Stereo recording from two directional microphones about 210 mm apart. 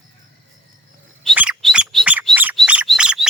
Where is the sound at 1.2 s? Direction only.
5° right (ahead or behind).